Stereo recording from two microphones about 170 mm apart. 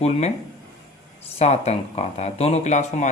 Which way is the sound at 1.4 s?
40° left (ahead or behind).